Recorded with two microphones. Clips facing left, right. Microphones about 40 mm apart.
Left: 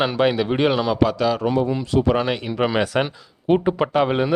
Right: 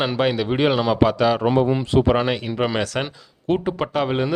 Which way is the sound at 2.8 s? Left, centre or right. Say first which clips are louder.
Left 4 dB; centre.